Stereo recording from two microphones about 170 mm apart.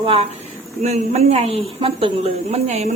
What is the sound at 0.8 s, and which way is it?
A woman's voice, 40° right (ahead or behind).